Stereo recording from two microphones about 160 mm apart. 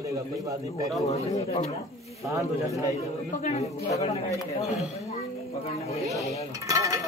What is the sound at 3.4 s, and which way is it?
Speech, 45° left (ahead or behind).